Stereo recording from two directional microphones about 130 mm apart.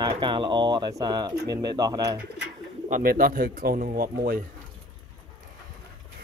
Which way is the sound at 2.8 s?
80° right.